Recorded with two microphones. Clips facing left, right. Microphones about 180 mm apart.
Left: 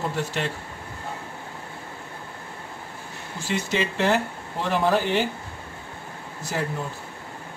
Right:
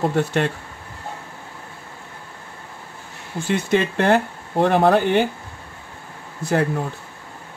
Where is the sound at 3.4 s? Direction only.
55° right (ahead or behind).